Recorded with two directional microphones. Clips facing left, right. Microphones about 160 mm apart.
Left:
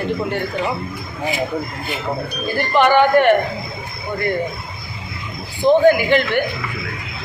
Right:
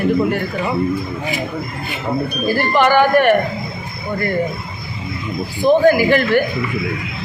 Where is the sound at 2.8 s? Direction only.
20° left (ahead or behind).